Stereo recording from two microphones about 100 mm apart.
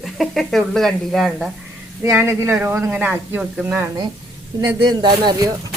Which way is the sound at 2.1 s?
20° right (ahead or behind).